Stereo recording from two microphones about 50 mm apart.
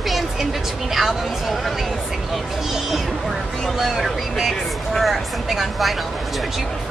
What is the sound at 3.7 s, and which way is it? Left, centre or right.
Speech, centre.